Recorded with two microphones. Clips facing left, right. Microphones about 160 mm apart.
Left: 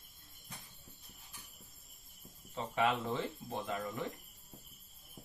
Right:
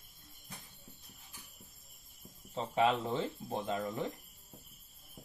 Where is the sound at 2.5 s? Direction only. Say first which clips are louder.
Right 3 dB; 25° right (ahead or behind).